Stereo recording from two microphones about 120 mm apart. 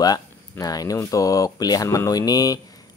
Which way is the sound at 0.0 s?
30° left (ahead or behind).